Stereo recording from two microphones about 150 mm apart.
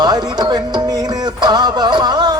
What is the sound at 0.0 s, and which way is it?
Music, 25° right (ahead or behind).